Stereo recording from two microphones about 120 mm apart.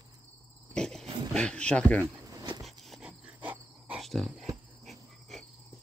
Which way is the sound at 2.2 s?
35° right (ahead or behind).